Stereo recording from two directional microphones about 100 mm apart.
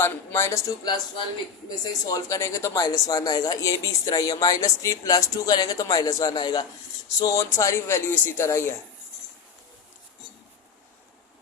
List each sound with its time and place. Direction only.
0.0 s speech: 25° left (ahead or behind); by 6.7 s 45° left (ahead or behind)
7.2 s speech: 35° left (ahead or behind)